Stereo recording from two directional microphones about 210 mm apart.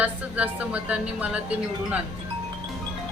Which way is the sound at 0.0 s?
5° right (ahead or behind).